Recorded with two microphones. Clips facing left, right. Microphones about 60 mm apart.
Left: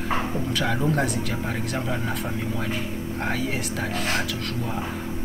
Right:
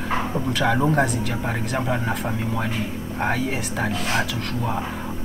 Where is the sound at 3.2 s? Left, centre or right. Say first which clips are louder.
Right 4 dB; centre.